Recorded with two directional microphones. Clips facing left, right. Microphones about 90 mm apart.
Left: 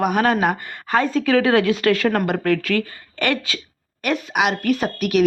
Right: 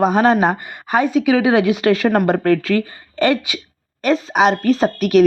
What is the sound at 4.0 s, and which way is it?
Speech, 30° right (ahead or behind).